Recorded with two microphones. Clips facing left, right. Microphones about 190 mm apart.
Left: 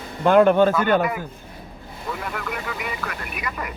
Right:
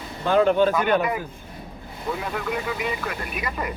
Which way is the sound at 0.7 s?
20° right (ahead or behind).